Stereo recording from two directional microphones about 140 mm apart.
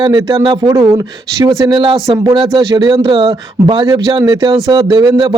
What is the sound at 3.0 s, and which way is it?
A man's voice, 40° right (ahead or behind).